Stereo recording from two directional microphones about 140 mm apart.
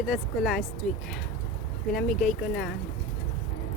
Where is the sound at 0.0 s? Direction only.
Centre (ahead or behind).